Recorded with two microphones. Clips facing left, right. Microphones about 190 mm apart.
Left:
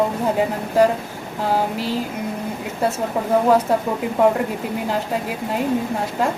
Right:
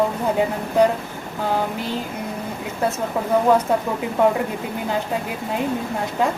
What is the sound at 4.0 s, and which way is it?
Speech, centre (ahead or behind).